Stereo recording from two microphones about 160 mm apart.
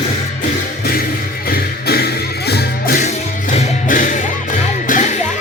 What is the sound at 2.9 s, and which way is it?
Music, 45° left (ahead or behind).